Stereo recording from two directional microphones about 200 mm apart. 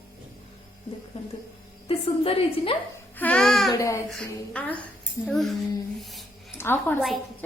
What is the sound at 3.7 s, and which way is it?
Child singing, 15° left (ahead or behind).